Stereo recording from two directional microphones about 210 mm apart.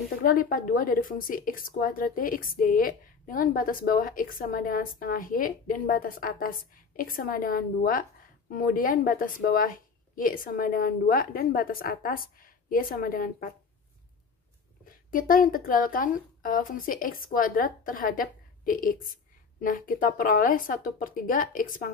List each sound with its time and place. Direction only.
0.1 s speech: 40° left (ahead or behind)
14.9 s speech: 40° left (ahead or behind)